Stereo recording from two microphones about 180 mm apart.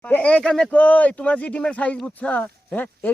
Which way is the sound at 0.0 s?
10° left (ahead or behind).